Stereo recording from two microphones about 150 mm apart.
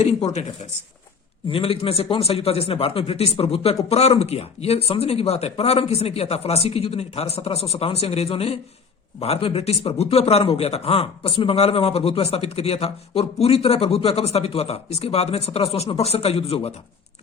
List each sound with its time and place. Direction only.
0.0 s speech: 45° left (ahead or behind)
1.5 s speech: 40° left (ahead or behind)